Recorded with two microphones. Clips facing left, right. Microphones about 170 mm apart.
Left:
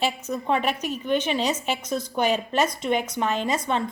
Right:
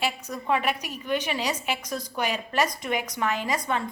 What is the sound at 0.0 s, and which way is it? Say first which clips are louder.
A woman's voice: left 4 dB; 25° left (ahead or behind).